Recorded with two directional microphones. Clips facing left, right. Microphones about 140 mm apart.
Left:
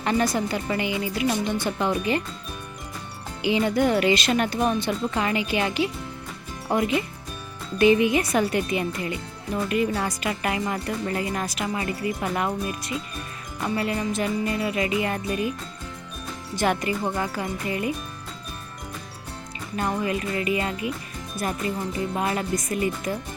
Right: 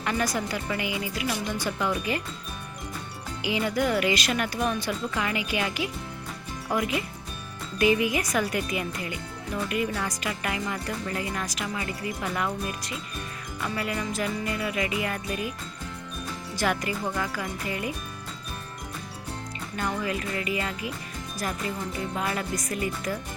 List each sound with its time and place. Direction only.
0.0 s speech: 30° left (ahead or behind)
3.4 s speech: 25° left (ahead or behind)
16.6 s speech: 25° left (ahead or behind)
19.7 s speech: 30° left (ahead or behind)